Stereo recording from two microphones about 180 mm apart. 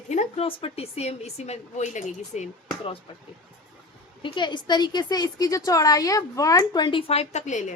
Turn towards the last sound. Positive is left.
turn(degrees=40)  # may be behind; listen again after turning